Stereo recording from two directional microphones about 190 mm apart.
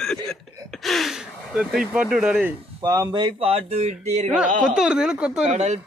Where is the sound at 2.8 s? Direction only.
20° right (ahead or behind).